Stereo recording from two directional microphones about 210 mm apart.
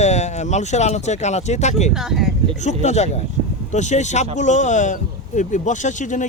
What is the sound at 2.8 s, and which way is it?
Speech, 35° left (ahead or behind).